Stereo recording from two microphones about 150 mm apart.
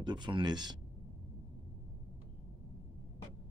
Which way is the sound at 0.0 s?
30° right (ahead or behind).